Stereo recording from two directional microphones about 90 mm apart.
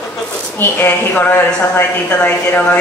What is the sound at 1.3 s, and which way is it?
Speech, 25° left (ahead or behind).